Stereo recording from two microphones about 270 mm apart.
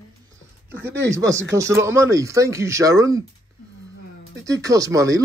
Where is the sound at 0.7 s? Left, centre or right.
Centre.